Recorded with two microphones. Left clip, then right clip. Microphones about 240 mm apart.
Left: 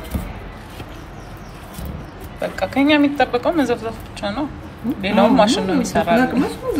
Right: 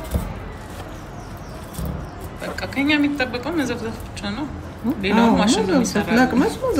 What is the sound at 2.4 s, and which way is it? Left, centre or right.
A woman's voice, centre.